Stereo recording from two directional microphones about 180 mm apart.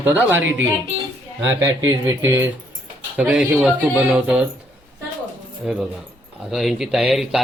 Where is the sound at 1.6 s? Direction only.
15° right (ahead or behind).